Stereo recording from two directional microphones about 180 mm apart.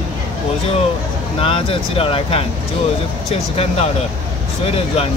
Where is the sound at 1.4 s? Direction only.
30° left (ahead or behind).